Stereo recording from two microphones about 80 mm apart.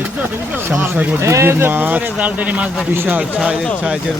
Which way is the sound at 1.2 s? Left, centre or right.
Right.